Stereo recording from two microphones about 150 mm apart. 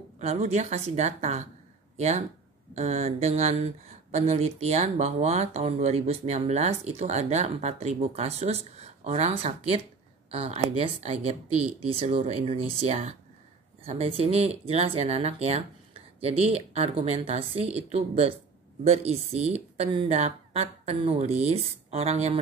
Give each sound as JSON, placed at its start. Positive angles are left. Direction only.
{"t": 0.2, "sound": "speech", "side_deg": -50}